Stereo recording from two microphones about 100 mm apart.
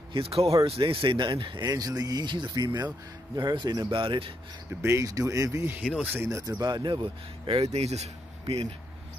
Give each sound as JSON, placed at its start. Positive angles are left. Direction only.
{"t": 0.1, "sound": "speech", "side_deg": -75}
{"t": 0.7, "sound": "speech", "side_deg": -60}
{"t": 3.9, "sound": "speech", "side_deg": -55}
{"t": 4.8, "sound": "speech", "side_deg": -30}
{"t": 5.8, "sound": "speech", "side_deg": -10}
{"t": 6.1, "sound": "speech", "side_deg": -25}
{"t": 6.6, "sound": "speech", "side_deg": -50}
{"t": 7.5, "sound": "speech", "side_deg": -90}